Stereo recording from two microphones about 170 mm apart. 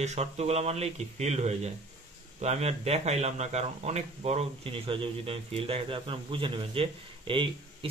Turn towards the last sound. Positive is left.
turn(degrees=-30)  # may be behind; listen again after turning